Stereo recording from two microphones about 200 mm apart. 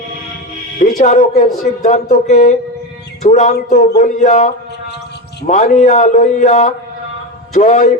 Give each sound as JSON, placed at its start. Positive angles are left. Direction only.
{"t": 0.8, "sound": "speech", "side_deg": 40}